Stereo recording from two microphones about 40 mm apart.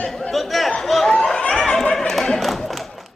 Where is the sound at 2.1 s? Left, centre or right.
Centre.